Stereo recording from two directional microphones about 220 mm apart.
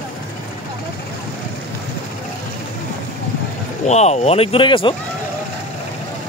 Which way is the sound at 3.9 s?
30° left (ahead or behind).